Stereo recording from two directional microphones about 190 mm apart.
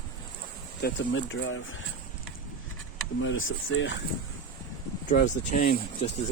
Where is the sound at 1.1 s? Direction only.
90° left.